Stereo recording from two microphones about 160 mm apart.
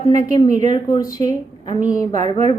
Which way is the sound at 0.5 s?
50° right (ahead or behind).